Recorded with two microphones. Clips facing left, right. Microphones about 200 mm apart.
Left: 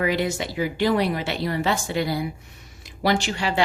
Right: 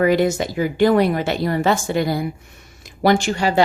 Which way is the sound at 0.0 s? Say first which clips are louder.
Right 7 dB; 45° right (ahead or behind).